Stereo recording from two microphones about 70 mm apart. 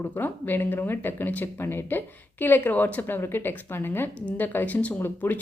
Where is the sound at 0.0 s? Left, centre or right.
Left.